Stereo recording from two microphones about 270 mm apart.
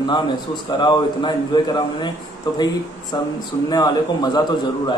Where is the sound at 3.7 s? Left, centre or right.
Centre.